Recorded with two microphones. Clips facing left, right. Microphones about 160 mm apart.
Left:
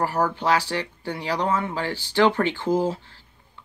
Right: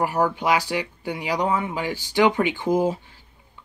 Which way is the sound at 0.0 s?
15° right (ahead or behind).